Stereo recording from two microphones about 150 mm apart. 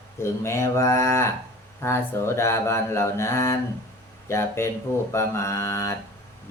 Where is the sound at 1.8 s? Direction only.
15° left (ahead or behind).